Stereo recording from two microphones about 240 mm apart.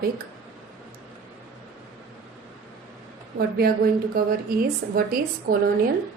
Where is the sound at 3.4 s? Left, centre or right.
Right.